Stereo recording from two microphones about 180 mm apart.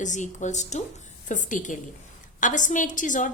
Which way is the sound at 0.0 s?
45° left (ahead or behind).